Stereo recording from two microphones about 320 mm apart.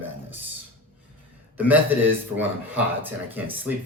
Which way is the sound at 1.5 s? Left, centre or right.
Centre.